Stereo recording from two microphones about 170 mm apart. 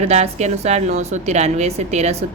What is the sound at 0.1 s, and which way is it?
Speech, 40° right (ahead or behind).